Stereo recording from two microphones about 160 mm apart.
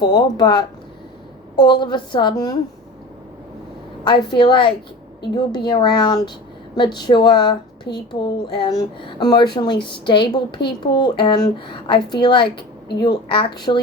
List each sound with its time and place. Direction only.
0.0 s a woman's voice: 30° left (ahead or behind)
4.0 s a woman's voice: 30° left (ahead or behind)